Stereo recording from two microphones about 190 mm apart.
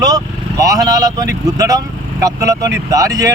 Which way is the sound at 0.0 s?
20° right (ahead or behind).